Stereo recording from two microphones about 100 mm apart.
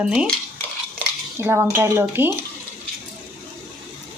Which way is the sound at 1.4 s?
25° right (ahead or behind).